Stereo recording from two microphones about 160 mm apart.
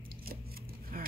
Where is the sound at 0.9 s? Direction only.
60° right (ahead or behind).